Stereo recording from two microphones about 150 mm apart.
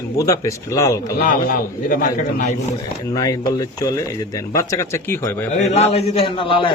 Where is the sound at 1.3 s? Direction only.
70° left (ahead or behind).